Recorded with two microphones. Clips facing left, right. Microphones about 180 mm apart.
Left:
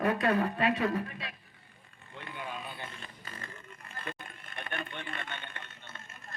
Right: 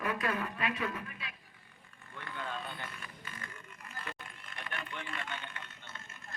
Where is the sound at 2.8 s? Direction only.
25° left (ahead or behind).